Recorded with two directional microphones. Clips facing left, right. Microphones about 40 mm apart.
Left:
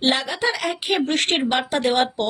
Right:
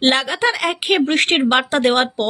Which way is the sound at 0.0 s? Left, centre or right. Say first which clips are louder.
Right 4 dB; right.